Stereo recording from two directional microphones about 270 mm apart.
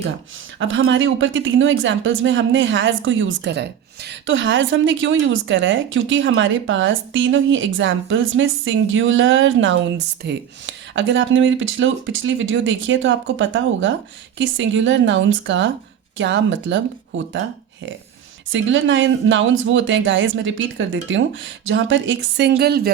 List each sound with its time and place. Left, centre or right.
0.6 s a woman's voice: right
18.5 s a woman's voice: right